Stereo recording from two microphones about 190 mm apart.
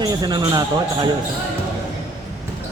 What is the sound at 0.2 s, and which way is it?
Speech, 20° right (ahead or behind).